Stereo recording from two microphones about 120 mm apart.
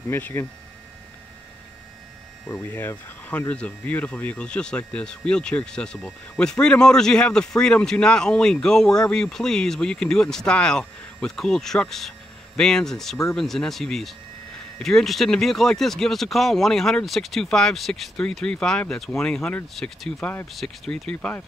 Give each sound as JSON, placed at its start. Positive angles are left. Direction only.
{"t": 0.1, "sound": "speech", "side_deg": 20}
{"t": 2.7, "sound": "speech", "side_deg": 15}